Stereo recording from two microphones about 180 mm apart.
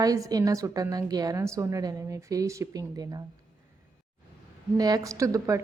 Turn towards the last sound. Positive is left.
turn(degrees=-15)  # may be behind; listen again after turning